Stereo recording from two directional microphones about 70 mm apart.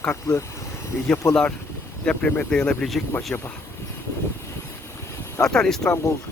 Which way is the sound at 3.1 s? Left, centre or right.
Left.